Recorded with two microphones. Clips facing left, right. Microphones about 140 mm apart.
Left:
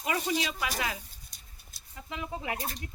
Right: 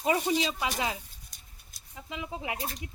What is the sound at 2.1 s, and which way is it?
Speech, 15° right (ahead or behind).